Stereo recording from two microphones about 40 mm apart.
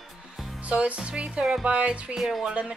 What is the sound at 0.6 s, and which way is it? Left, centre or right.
Music, right.